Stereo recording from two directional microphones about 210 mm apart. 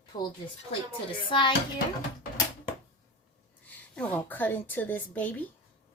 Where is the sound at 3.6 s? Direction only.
5° left (ahead or behind).